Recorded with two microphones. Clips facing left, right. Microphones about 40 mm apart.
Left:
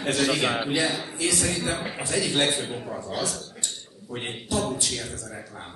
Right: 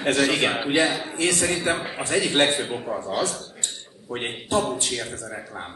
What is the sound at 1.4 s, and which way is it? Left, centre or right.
A man's voice, right.